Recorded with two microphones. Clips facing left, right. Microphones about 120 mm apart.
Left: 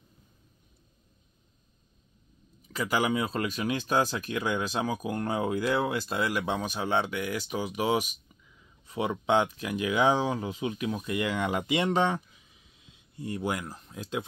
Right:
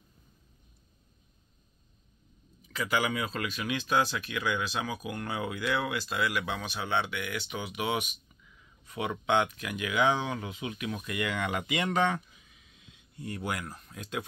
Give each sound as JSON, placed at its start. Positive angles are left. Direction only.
{"t": 2.7, "sound": "speech", "side_deg": 35}